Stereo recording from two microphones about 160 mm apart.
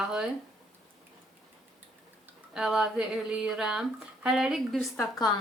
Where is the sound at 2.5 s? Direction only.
5° right (ahead or behind).